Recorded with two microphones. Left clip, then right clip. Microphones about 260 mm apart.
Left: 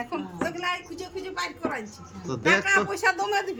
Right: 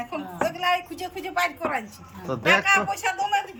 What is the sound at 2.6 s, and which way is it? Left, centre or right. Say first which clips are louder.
Speech: right 1 dB; centre.